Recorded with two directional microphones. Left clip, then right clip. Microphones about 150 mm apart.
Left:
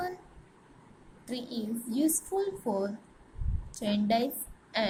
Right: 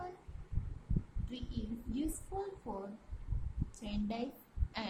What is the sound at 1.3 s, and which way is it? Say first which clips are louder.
Speech: left 10 dB; 20° left (ahead or behind).